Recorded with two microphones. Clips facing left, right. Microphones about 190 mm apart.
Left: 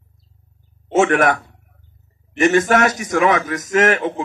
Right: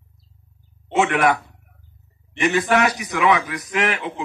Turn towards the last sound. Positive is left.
turn(degrees=45)  # may be behind; listen again after turning